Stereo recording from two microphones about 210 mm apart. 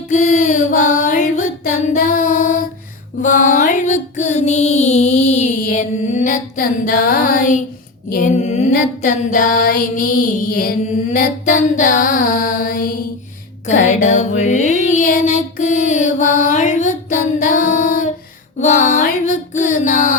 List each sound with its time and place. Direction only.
0.1 s child singing: 35° left (ahead or behind)
3.2 s music: 40° left (ahead or behind)
8.1 s female singing: 35° left (ahead or behind)
13.7 s child singing: 35° left (ahead or behind)
18.6 s music: 35° left (ahead or behind)